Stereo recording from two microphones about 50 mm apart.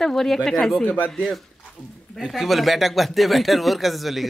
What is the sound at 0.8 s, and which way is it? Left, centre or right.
Speech, left.